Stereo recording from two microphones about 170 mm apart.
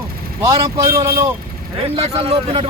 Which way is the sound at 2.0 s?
35° right (ahead or behind).